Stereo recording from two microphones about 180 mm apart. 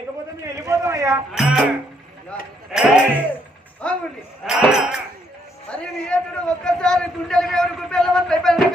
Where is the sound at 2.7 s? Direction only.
5° right (ahead or behind).